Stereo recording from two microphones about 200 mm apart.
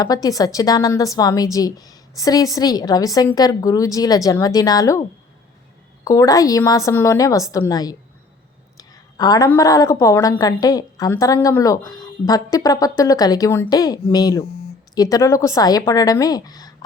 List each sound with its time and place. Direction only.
0.0 s a woman's voice: 20° left (ahead or behind)
6.1 s a woman's voice: 15° left (ahead or behind)